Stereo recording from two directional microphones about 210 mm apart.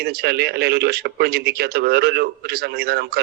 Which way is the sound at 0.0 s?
50° right (ahead or behind).